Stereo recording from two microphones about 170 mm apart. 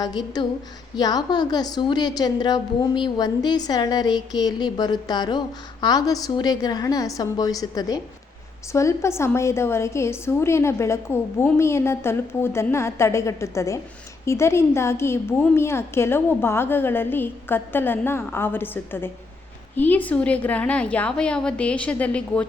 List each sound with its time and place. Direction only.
0.0 s a woman's voice: 25° left (ahead or behind); by 22.4 s 5° left (ahead or behind)